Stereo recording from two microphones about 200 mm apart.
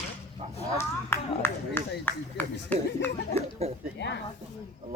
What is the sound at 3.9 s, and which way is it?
Speech, 60° left (ahead or behind).